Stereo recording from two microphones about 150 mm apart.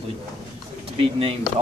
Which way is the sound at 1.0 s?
40° right (ahead or behind).